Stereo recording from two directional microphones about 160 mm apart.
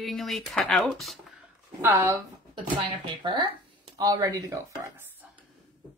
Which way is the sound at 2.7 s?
30° right (ahead or behind).